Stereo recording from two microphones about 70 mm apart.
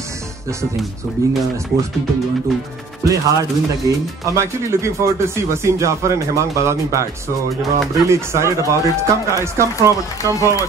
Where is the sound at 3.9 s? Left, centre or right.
Right.